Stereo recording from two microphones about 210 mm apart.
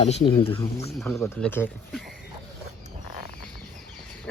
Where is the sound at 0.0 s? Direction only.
30° left (ahead or behind).